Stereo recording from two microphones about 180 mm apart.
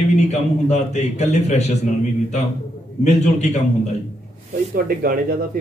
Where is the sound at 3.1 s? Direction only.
40° left (ahead or behind).